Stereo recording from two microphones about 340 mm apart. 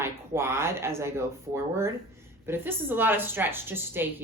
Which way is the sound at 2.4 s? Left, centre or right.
Centre.